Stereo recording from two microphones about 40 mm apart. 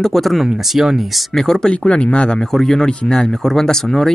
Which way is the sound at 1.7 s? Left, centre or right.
Left.